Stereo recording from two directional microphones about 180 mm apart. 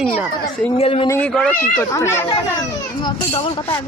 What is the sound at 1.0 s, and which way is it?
Speech, 15° left (ahead or behind).